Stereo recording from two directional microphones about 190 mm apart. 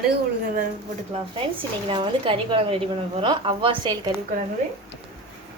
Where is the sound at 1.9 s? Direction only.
25° right (ahead or behind).